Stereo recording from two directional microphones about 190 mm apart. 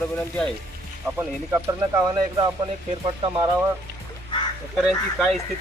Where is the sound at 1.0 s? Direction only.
15° right (ahead or behind).